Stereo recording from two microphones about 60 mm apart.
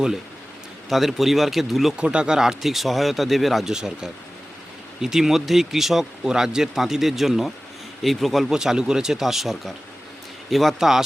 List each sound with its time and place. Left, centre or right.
0.9 s speech: centre
2.0 s speech: centre
8.4 s speech: centre